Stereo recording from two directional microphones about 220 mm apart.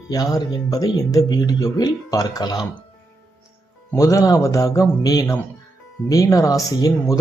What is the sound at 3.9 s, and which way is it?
Speech, 15° left (ahead or behind).